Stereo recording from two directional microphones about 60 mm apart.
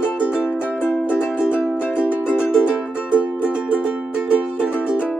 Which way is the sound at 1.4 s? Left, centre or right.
Centre.